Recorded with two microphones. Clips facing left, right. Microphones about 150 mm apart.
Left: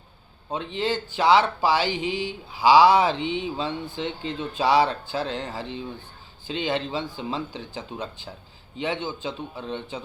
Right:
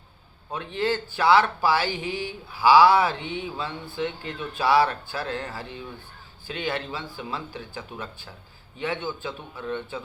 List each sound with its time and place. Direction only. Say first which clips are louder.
0.5 s speech: even; 20° left (ahead or behind)